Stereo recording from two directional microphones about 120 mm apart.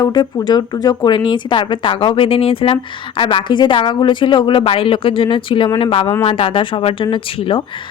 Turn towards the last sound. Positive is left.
turn(degrees=45)  # may be behind; listen again after turning